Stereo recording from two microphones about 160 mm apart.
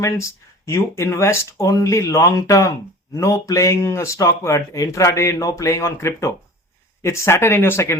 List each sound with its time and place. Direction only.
0.0 s speech: 20° left (ahead or behind)